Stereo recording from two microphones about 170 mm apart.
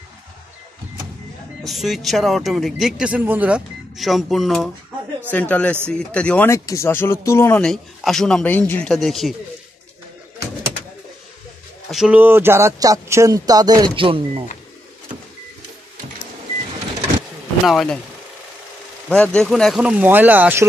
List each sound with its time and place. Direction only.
1.6 s speech: centre (ahead or behind)
11.9 s speech: 5° right (ahead or behind); by 14.4 s 30° right (ahead or behind)
17.6 s speech: centre (ahead or behind)
19.0 s speech: 5° left (ahead or behind); by 20.6 s 10° right (ahead or behind)